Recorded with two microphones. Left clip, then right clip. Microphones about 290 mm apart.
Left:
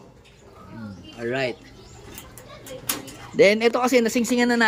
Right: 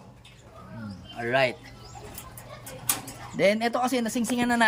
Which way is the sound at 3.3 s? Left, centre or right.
Centre.